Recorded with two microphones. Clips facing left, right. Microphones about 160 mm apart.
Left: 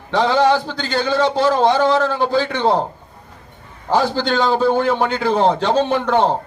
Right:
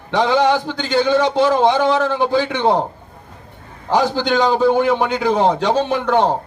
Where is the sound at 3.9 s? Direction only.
15° right (ahead or behind).